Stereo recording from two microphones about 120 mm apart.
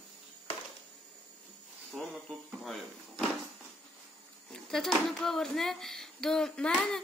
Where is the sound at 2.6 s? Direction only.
Centre (ahead or behind).